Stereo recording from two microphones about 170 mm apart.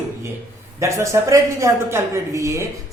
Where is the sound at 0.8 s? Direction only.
15° right (ahead or behind).